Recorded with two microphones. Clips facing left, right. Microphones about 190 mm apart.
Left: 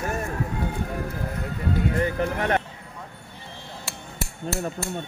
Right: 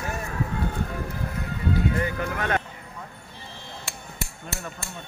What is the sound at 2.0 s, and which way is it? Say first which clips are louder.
Music: left 3 dB; 30° left (ahead or behind).